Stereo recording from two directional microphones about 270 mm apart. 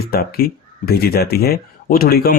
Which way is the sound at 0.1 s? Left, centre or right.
Left.